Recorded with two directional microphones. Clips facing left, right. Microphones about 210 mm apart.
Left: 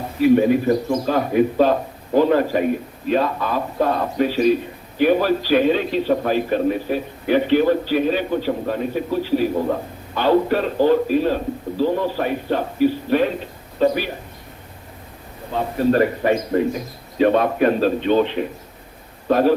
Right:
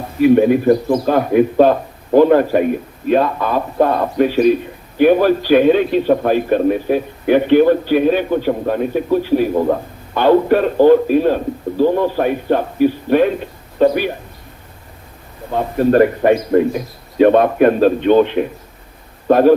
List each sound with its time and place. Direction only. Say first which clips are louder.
0.2 s a man's voice: right 4 dB; 55° right (ahead or behind)
15.5 s a man's voice: right 5 dB; 50° right (ahead or behind)